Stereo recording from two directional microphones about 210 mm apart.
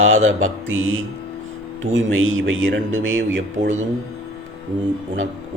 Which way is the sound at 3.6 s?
35° right (ahead or behind).